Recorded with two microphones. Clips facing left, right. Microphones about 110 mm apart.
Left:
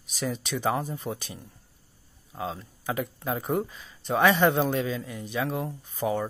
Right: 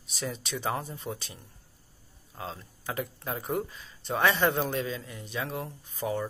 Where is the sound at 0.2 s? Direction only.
20° left (ahead or behind).